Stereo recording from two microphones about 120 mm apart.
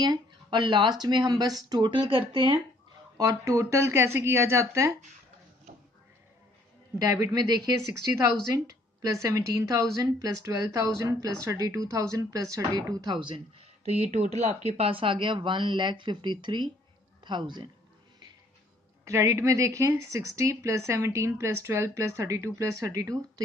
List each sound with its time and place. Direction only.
0.0 s speech: 35° right (ahead or behind)
3.2 s a woman's voice: 25° right (ahead or behind)
7.1 s a woman's voice: 30° right (ahead or behind)
14.7 s a man's voice: 50° right (ahead or behind)
19.0 s a woman's voice: 25° right (ahead or behind)